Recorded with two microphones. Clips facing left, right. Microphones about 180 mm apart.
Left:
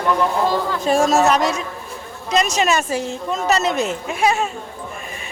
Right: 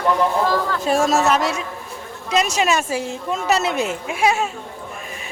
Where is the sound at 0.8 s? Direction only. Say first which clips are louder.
Left 3 dB; 5° right (ahead or behind).